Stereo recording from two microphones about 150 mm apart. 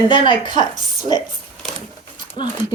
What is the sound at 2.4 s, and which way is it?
Speech, 30° left (ahead or behind).